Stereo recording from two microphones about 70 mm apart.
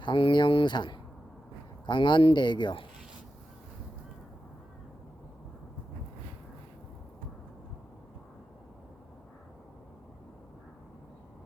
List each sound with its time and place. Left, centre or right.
0.0 s speech: left
1.9 s speech: left